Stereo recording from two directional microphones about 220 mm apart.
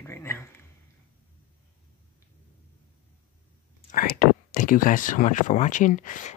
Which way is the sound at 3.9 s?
40° left (ahead or behind).